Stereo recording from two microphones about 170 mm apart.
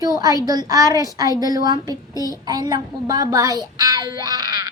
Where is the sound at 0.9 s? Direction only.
20° left (ahead or behind).